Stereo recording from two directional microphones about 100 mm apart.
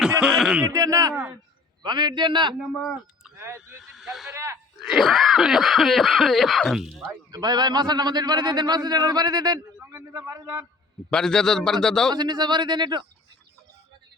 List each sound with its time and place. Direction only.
0.2 s a sound: 5° right (ahead or behind)
0.7 s a man's voice: 35° right (ahead or behind)
1.8 s a man's voice: 45° right (ahead or behind)
3.3 s speech: 25° right (ahead or behind)
3.9 s snake: centre (ahead or behind)
4.4 s a sound: 25° right (ahead or behind)
4.8 s a sound: centre (ahead or behind)
7.3 s a man's voice: 40° right (ahead or behind)
9.9 s a man's voice: 30° right (ahead or behind)
11.1 s a man's voice: 5° left (ahead or behind)
12.1 s a man's voice: 45° right (ahead or behind)